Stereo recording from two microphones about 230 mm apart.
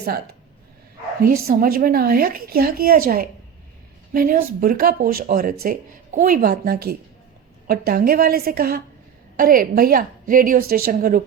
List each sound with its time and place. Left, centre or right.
1.4 s speech: right